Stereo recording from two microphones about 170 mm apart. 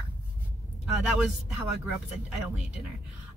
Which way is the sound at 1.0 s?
5° right (ahead or behind).